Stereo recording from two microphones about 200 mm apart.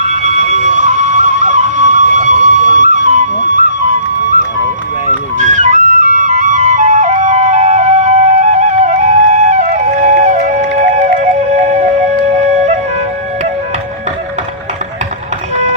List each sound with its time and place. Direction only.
0.0 s music: 35° right (ahead or behind)
5.4 s flute: 40° right (ahead or behind)